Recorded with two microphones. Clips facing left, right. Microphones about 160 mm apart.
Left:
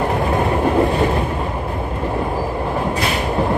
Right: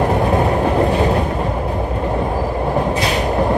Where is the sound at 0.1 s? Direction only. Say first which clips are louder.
Right 2 dB; 20° right (ahead or behind).